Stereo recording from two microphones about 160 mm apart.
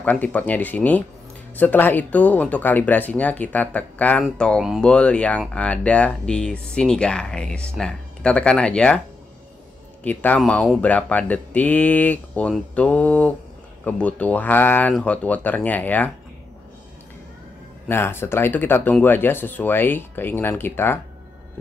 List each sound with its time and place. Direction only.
0.0 s speech: 10° left (ahead or behind)
10.0 s speech: 10° left (ahead or behind)
17.8 s speech: 15° left (ahead or behind)